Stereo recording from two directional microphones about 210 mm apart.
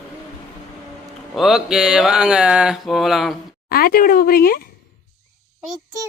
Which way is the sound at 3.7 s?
45° left (ahead or behind).